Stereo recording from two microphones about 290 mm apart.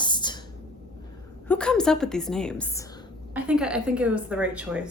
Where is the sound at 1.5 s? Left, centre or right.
Centre.